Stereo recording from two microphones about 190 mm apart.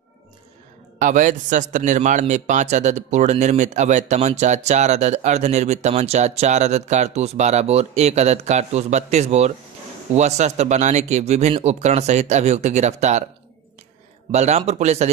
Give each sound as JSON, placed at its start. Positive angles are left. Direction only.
{"t": 0.9, "sound": "a man's voice", "side_deg": -45}
{"t": 14.3, "sound": "a man's voice", "side_deg": -35}